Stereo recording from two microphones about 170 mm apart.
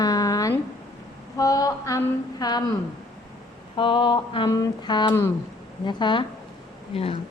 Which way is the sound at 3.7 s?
30° left (ahead or behind).